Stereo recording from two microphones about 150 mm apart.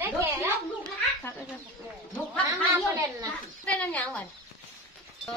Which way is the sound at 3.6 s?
10° left (ahead or behind).